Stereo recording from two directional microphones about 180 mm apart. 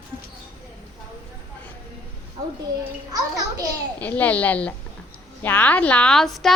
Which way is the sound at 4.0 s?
10° left (ahead or behind).